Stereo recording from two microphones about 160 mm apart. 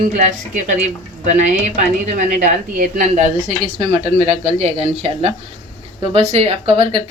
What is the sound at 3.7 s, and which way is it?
Speech, 40° right (ahead or behind).